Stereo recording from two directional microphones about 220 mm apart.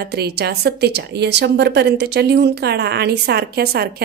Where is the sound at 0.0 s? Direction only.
50° right (ahead or behind).